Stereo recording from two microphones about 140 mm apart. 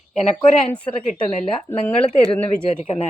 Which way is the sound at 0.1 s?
55° left (ahead or behind).